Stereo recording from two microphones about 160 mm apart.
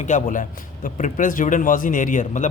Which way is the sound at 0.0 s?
50° left (ahead or behind).